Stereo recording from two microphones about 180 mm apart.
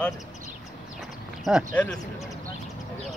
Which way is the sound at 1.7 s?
10° left (ahead or behind).